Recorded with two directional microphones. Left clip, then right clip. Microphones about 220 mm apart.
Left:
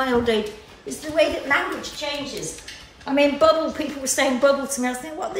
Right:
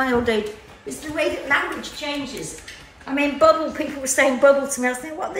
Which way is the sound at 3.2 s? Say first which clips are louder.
Right 1 dB; centre (ahead or behind).